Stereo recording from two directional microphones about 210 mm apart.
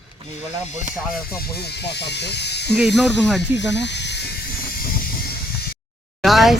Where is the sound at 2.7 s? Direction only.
Centre (ahead or behind).